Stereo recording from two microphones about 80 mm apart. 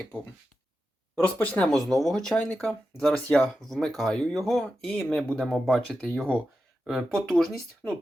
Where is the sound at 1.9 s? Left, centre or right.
Centre.